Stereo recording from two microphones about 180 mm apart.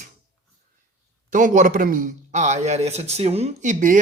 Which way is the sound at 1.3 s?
45° right (ahead or behind).